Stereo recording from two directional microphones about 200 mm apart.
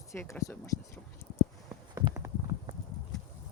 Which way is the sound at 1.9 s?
15° right (ahead or behind).